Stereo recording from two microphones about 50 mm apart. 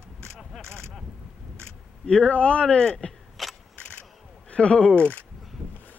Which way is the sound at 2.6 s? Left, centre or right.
Centre.